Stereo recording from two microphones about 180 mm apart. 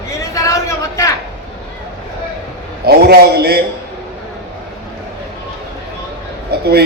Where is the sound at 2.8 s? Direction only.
65° right (ahead or behind).